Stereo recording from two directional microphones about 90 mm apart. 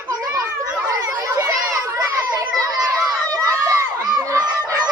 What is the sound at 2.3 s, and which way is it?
Children playing, 40° right (ahead or behind).